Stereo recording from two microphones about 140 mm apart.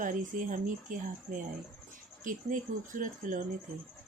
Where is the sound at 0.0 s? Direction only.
70° right (ahead or behind).